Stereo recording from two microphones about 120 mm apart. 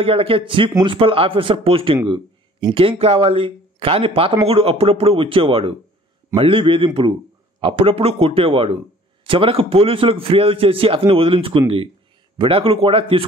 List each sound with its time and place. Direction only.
0.0 s speech: 50° right (ahead or behind)